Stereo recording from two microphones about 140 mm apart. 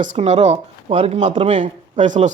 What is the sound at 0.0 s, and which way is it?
Speech, 60° right (ahead or behind).